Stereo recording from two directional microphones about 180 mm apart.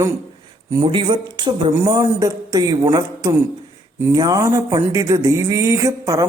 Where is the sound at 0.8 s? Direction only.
30° right (ahead or behind).